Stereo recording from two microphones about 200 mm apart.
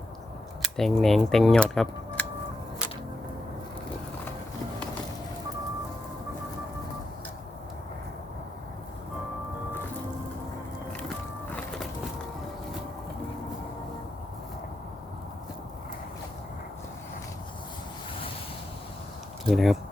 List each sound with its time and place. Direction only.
0.6 s speech: centre (ahead or behind)
19.5 s speech: centre (ahead or behind)